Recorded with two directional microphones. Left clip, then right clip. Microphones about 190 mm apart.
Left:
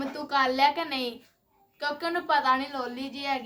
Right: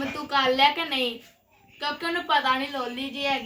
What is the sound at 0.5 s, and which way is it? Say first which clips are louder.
Speech: right 3 dB; 15° left (ahead or behind).